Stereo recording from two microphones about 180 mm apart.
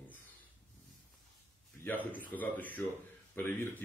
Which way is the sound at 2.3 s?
10° left (ahead or behind).